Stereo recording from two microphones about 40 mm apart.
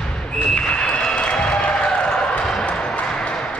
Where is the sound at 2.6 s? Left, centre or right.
Left.